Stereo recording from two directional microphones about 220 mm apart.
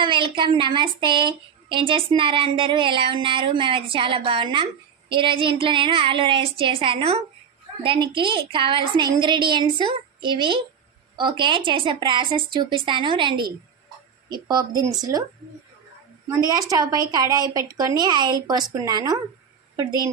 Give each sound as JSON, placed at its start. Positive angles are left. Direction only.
{"t": 0.0, "sound": "a woman's voice", "side_deg": -20}
{"t": 16.4, "sound": "speech", "side_deg": -15}